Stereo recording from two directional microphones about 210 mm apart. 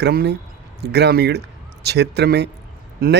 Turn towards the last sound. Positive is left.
turn(degrees=-45)  # may be behind; listen again after turning